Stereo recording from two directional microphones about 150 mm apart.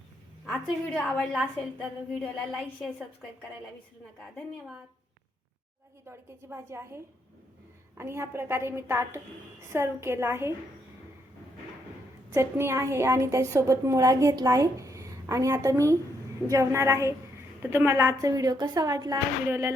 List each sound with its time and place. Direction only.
0.4 s a woman's voice: 5° left (ahead or behind)
6.1 s a woman's voice: 20° right (ahead or behind)
12.3 s a woman's voice: 15° right (ahead or behind)